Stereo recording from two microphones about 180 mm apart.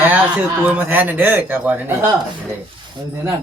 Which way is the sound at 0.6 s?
10° right (ahead or behind).